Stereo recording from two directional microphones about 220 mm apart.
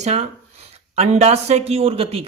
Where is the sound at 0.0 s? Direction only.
30° right (ahead or behind).